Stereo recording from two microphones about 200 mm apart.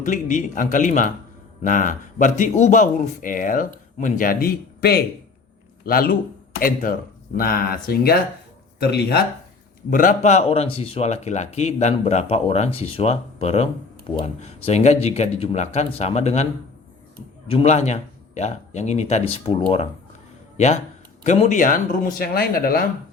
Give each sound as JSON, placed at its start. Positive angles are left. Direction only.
{"t": 0.0, "sound": "speech", "side_deg": 40}
{"t": 9.9, "sound": "speech", "side_deg": 40}
{"t": 17.5, "sound": "speech", "side_deg": 30}
{"t": 21.2, "sound": "speech", "side_deg": 35}